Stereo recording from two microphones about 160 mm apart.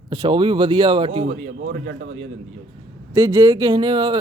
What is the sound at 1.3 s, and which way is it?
Speech, 90° right.